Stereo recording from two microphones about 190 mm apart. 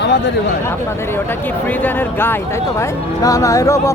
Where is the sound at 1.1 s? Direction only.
10° left (ahead or behind).